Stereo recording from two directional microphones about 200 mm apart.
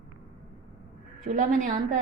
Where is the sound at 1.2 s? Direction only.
40° right (ahead or behind).